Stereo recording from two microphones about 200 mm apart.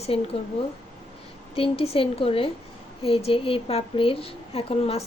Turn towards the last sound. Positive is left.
turn(degrees=30)  # may be behind; listen again after turning